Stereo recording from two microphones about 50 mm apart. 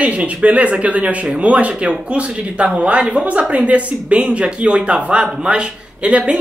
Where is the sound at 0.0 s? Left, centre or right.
Right.